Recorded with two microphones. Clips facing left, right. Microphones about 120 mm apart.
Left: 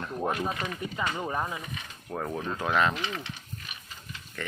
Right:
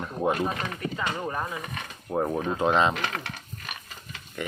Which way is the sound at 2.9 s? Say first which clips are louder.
Right 3 dB; 60° right (ahead or behind).